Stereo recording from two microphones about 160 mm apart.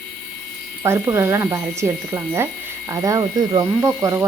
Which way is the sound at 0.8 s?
15° right (ahead or behind).